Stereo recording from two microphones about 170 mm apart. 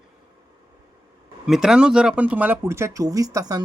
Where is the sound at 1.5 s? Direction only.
5° right (ahead or behind).